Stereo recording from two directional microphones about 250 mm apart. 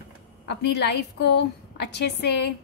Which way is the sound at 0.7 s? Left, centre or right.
Left.